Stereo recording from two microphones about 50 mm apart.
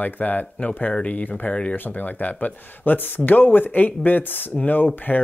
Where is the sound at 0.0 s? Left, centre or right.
Left.